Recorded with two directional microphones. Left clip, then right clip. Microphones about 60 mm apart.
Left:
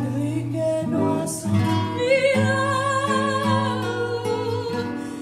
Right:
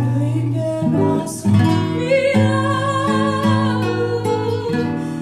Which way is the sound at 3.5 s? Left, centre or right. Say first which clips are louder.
Right 4 dB; right.